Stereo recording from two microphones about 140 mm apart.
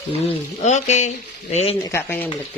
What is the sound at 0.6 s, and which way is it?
Speech, 55° left (ahead or behind).